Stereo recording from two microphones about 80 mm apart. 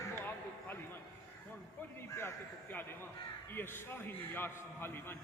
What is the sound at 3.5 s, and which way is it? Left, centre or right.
A man's voice, left.